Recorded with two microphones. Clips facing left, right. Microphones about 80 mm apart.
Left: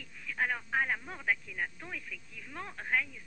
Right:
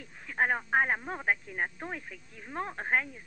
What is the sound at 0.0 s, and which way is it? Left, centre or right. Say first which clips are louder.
Speech: right 4 dB; right.